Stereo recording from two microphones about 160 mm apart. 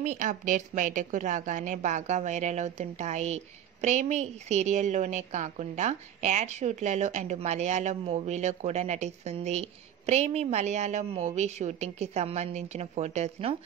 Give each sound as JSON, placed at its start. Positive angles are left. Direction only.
{"t": 0.0, "sound": "a woman's voice", "side_deg": -50}